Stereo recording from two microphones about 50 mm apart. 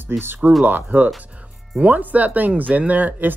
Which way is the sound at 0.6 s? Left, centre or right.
Right.